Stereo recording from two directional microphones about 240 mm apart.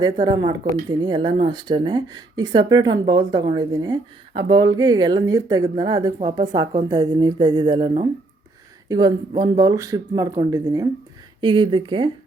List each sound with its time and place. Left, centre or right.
0.0 s speech: centre